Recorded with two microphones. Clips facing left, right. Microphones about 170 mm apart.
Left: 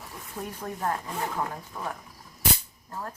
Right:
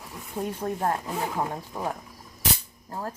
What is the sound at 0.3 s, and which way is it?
Speech, 30° right (ahead or behind).